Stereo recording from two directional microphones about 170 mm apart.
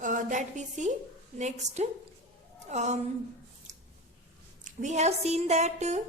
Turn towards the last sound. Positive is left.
turn(degrees=-40)  # may be behind; listen again after turning